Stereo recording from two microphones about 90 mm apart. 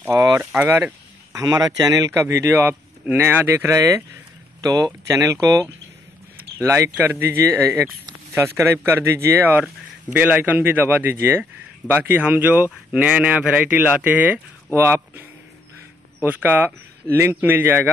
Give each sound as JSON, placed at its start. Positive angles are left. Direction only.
{"t": 0.4, "sound": "speech", "side_deg": -15}
{"t": 1.3, "sound": "speech", "side_deg": -40}
{"t": 2.1, "sound": "speech", "side_deg": -30}
{"t": 4.6, "sound": "speech", "side_deg": -45}
{"t": 6.6, "sound": "speech", "side_deg": -30}
{"t": 16.3, "sound": "speech", "side_deg": -20}